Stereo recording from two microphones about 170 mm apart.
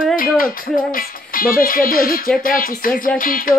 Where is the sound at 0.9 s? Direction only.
60° left (ahead or behind).